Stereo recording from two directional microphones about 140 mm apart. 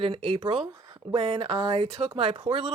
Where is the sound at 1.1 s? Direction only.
40° right (ahead or behind).